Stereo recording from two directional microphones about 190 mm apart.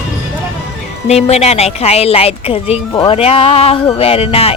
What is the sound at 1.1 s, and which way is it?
A woman's voice, 35° left (ahead or behind).